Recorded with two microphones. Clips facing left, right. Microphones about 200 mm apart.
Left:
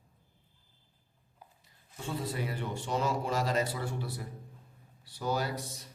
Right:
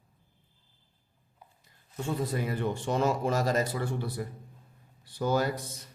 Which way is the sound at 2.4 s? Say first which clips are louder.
Right 6 dB; 55° right (ahead or behind).